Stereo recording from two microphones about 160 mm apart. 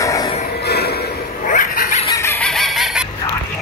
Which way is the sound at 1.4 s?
55° left (ahead or behind).